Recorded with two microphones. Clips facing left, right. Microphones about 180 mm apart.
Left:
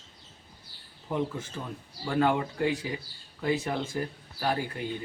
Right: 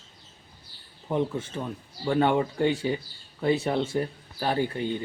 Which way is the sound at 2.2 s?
30° right (ahead or behind).